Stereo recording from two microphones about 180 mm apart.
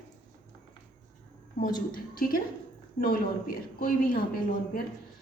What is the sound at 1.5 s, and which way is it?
A woman's voice, 50° left (ahead or behind).